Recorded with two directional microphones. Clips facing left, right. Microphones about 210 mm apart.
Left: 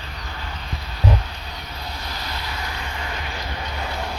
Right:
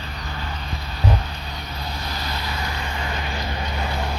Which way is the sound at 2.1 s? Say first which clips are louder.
Right 3 dB; 35° right (ahead or behind).